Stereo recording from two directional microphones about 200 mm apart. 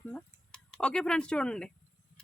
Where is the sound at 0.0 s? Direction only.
5° left (ahead or behind).